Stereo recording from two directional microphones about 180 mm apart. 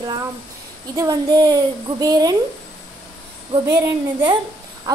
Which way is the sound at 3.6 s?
25° right (ahead or behind).